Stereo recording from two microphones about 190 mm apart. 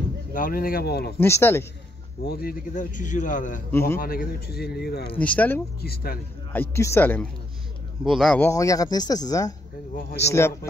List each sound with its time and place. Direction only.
0.3 s a man's voice: 45° left (ahead or behind)
1.2 s a man's voice: 10° left (ahead or behind)
2.2 s a man's voice: 50° left (ahead or behind)
5.1 s a man's voice: 5° left (ahead or behind)
5.8 s speech: 55° left (ahead or behind)
6.5 s a man's voice: 10° left (ahead or behind)
8.4 s speech: 15° left (ahead or behind)
9.9 s speech: 60° left (ahead or behind)
10.3 s a man's voice: 15° left (ahead or behind)